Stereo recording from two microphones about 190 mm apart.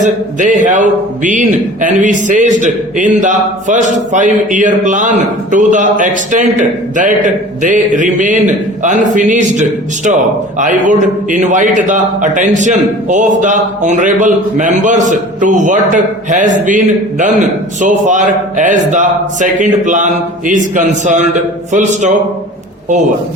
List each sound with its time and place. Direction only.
0.0 s a man's voice: 40° right (ahead or behind)